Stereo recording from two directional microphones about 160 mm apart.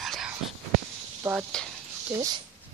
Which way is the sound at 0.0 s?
Centre (ahead or behind).